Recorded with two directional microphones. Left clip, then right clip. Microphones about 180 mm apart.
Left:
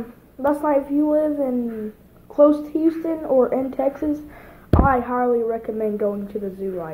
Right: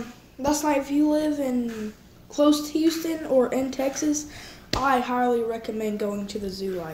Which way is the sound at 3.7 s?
10° right (ahead or behind).